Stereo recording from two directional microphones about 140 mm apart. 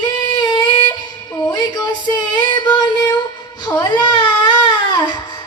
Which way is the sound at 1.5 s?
30° left (ahead or behind).